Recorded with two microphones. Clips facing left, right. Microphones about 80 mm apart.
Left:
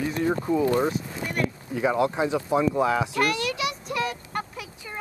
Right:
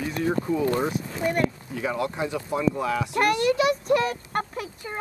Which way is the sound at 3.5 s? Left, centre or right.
Right.